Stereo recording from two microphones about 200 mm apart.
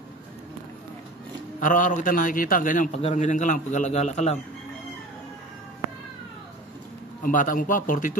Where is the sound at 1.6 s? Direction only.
40° left (ahead or behind).